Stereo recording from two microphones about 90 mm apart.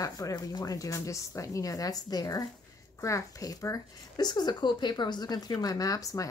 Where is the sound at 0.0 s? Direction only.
40° left (ahead or behind).